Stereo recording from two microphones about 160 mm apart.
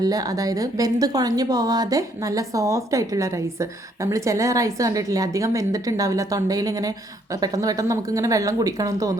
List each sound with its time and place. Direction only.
0.0 s a woman's voice: 25° right (ahead or behind)